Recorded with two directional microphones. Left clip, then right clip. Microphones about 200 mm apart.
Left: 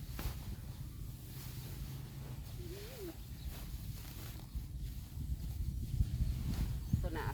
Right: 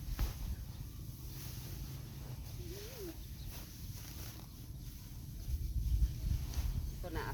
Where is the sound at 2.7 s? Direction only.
20° left (ahead or behind).